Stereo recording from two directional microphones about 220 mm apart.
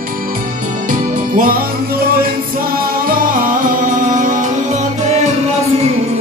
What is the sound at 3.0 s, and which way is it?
Music, 40° right (ahead or behind).